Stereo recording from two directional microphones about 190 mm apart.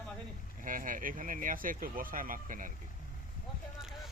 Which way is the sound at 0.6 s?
45° right (ahead or behind).